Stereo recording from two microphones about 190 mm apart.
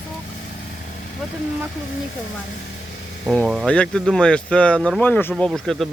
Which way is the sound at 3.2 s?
Centre (ahead or behind).